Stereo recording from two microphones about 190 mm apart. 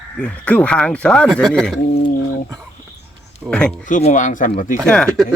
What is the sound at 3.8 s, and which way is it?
Speech, 40° left (ahead or behind).